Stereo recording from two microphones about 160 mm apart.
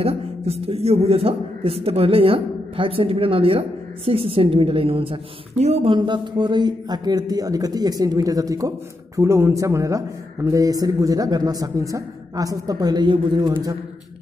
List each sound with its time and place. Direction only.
0.0 s a man's voice: 40° right (ahead or behind)